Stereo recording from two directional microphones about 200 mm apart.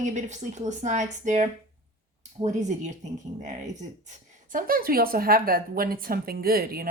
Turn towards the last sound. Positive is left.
turn(degrees=-50)  # may be behind; listen again after turning